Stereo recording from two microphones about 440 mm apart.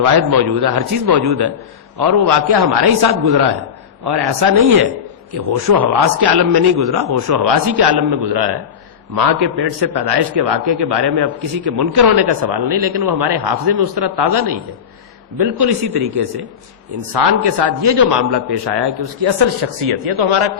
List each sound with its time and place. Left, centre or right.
0.0 s a man's voice: right